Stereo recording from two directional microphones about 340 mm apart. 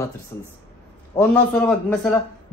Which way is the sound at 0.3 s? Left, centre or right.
Centre.